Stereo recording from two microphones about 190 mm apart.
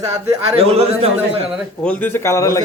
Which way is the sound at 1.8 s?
10° left (ahead or behind).